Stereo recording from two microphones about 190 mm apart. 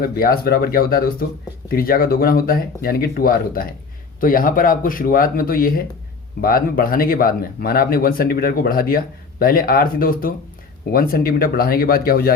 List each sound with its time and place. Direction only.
0.0 s speech: 50° left (ahead or behind)